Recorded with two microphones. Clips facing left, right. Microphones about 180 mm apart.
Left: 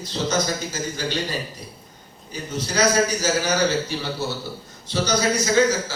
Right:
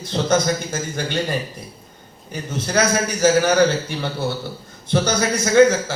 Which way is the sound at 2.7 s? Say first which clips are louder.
Even; 50° right (ahead or behind).